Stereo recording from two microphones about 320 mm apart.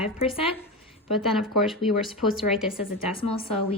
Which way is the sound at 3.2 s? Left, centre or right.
Centre.